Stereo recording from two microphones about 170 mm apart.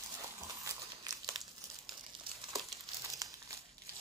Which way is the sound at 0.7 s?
20° right (ahead or behind).